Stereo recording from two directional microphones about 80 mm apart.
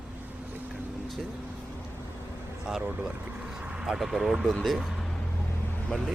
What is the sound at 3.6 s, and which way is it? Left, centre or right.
Speech, centre.